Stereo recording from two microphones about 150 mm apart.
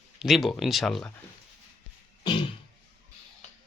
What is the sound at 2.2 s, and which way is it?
Music, 35° left (ahead or behind).